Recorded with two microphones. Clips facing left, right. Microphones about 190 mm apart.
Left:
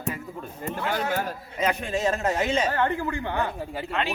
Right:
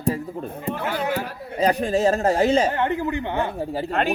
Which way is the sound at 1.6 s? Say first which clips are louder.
Right 6 dB; 35° right (ahead or behind).